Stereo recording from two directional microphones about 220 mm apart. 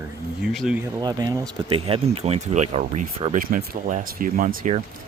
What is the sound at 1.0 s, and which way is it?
Speech, 20° right (ahead or behind).